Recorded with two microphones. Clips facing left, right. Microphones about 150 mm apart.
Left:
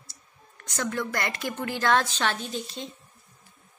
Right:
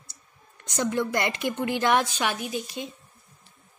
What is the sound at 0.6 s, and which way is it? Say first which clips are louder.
Speech: right 4 dB; 20° right (ahead or behind).